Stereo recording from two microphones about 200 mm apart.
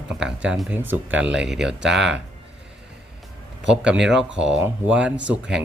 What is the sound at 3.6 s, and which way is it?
Speech, 5° right (ahead or behind).